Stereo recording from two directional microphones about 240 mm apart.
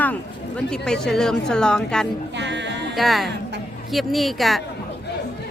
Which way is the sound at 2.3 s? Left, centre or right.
Right.